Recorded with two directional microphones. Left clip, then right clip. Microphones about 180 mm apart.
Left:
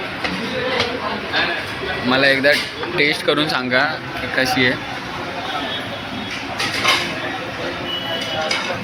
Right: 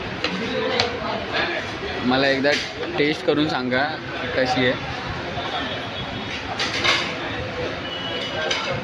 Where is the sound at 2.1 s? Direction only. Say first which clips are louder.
Left 5 dB; 25° right (ahead or behind).